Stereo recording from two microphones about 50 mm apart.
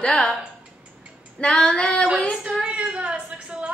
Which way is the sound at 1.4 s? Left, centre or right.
Left.